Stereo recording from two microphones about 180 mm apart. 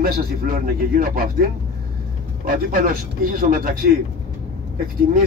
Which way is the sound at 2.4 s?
50° right (ahead or behind).